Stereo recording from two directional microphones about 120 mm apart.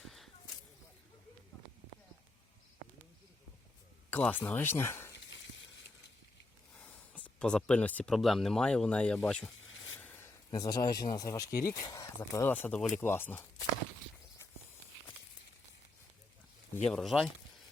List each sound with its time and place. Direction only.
4.1 s speech: 15° left (ahead or behind)
6.7 s a sound: 10° left (ahead or behind)
8.1 s speech: centre (ahead or behind)
10.5 s speech: 35° left (ahead or behind); by 13.4 s 20° left (ahead or behind)
16.9 s speech: centre (ahead or behind)